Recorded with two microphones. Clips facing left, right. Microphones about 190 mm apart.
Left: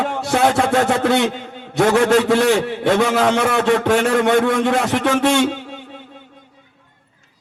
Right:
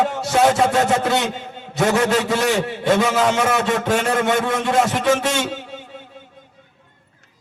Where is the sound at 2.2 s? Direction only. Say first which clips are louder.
Left 4 dB; 65° left (ahead or behind).